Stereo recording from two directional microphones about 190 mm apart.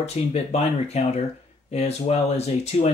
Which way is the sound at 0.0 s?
35° left (ahead or behind).